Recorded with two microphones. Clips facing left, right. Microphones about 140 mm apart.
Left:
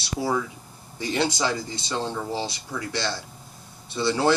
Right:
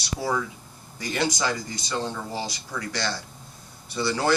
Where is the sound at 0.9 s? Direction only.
25° left (ahead or behind).